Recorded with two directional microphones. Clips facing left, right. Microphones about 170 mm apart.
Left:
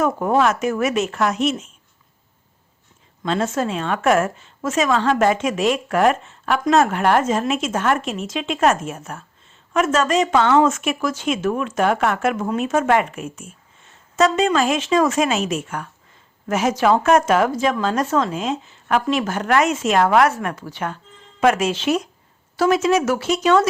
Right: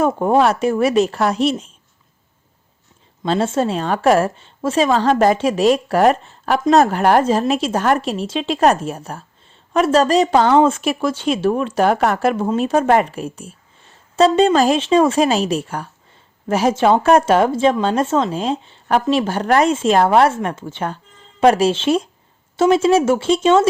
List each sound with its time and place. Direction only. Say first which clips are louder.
0.0 s a woman's voice: right 3 dB; 30° right (ahead or behind)
3.2 s a woman's voice: right 3 dB; 30° right (ahead or behind)